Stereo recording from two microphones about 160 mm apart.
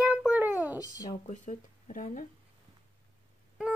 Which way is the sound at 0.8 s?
25° left (ahead or behind).